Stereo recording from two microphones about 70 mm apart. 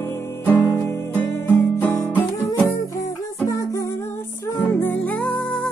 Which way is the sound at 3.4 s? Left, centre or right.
Left.